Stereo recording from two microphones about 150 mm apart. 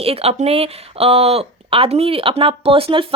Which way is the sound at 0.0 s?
40° right (ahead or behind).